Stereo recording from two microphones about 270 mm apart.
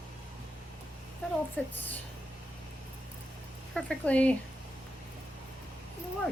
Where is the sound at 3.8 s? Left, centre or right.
Centre.